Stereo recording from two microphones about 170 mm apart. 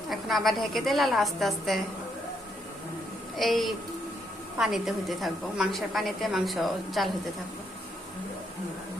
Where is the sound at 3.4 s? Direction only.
Centre (ahead or behind).